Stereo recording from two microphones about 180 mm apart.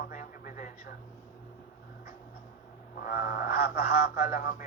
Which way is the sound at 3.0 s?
55° left (ahead or behind).